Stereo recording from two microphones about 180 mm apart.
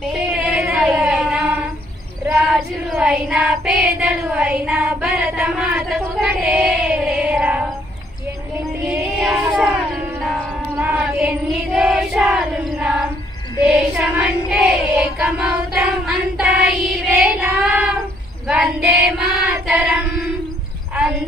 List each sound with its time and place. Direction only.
0.1 s a sound: 5° right (ahead or behind)
2.2 s child singing: 5° right (ahead or behind)
8.8 s music: 10° right (ahead or behind)
9.4 s a sound: 5° right (ahead or behind)
13.7 s choir: 5° right (ahead or behind)
17.2 s child singing: 5° right (ahead or behind)